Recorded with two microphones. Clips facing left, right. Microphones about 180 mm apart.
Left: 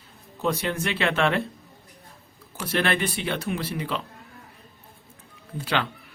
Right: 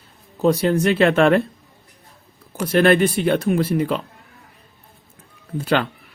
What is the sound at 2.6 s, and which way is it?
A man's voice, 45° right (ahead or behind).